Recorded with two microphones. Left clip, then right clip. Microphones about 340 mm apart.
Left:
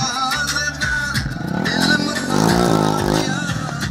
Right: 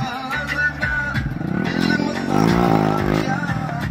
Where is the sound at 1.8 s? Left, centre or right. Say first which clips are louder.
Left 4 dB; left.